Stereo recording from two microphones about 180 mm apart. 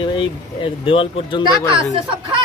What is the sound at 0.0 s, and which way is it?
Speech, 25° left (ahead or behind).